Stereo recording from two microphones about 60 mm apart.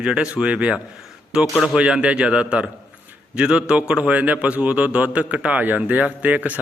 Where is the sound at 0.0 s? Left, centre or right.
Centre.